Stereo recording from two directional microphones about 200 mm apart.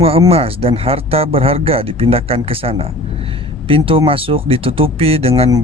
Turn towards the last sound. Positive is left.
turn(degrees=-30)  # may be behind; listen again after turning